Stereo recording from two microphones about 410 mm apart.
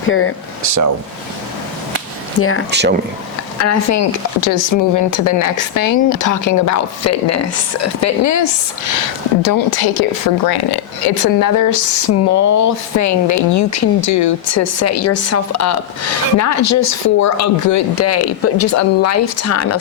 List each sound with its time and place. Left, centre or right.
0.1 s speech: left
0.6 s speech: right
2.4 s speech: left
2.6 s speech: right
3.6 s speech: left